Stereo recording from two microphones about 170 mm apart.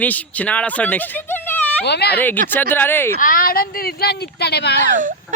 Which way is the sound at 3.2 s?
55° left (ahead or behind).